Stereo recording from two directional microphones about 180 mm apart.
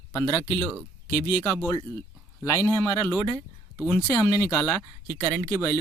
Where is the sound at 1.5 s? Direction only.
15° left (ahead or behind).